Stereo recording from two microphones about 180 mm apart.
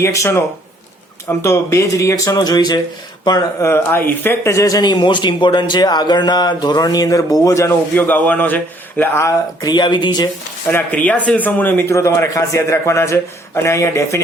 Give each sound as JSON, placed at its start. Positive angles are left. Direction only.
{"t": 0.0, "sound": "a man's voice", "side_deg": 15}
{"t": 10.7, "sound": "a man's voice", "side_deg": 10}